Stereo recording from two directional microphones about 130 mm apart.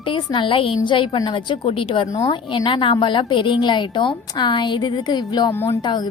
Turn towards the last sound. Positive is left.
turn(degrees=30)  # may be behind; listen again after turning